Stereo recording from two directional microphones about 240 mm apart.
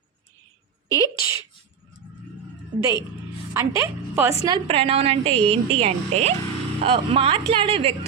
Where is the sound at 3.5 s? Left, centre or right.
Centre.